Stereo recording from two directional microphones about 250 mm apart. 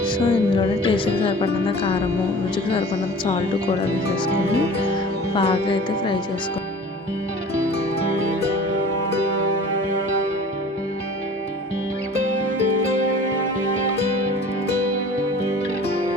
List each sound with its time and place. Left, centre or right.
0.0 s music: centre
5.3 s music: left